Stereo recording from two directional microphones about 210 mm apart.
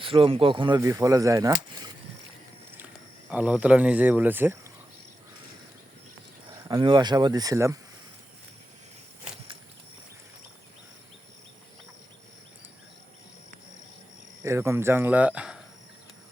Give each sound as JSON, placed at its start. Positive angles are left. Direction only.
{"t": 0.0, "sound": "speech", "side_deg": -25}
{"t": 2.7, "sound": "speech", "side_deg": -5}
{"t": 6.7, "sound": "speech", "side_deg": -20}
{"t": 14.4, "sound": "speech", "side_deg": -15}